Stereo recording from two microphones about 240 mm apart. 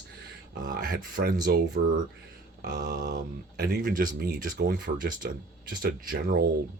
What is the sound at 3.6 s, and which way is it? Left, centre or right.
Speech, right.